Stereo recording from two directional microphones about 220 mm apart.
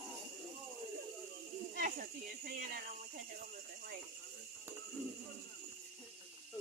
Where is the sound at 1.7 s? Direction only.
40° right (ahead or behind).